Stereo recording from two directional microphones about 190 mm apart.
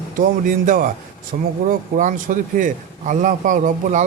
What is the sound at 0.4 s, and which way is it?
A man's voice, 45° right (ahead or behind).